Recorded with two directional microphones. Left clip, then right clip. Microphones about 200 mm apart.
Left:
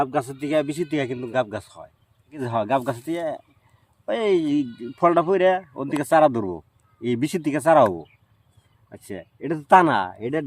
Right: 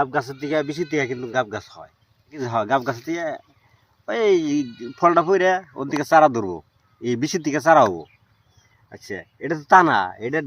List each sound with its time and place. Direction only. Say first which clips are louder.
0.0 s a man's voice: right 1 dB; 20° left (ahead or behind)
8.9 s a man's voice: right 3 dB; 20° left (ahead or behind)